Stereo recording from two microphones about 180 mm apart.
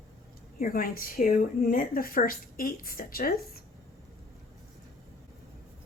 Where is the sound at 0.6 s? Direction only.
50° left (ahead or behind).